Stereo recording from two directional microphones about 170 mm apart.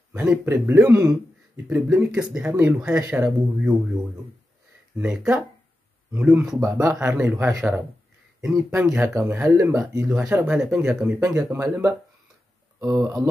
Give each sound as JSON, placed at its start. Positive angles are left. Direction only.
{"t": 0.1, "sound": "speech", "side_deg": -15}
{"t": 4.9, "sound": "speech", "side_deg": -5}
{"t": 10.0, "sound": "speech", "side_deg": -5}